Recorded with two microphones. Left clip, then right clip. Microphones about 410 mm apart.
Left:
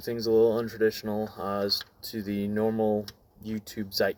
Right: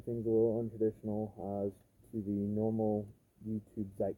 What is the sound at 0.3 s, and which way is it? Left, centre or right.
Speech, left.